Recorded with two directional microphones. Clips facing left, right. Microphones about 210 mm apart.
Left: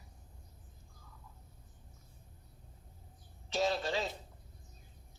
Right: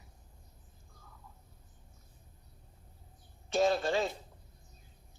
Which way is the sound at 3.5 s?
50° right (ahead or behind).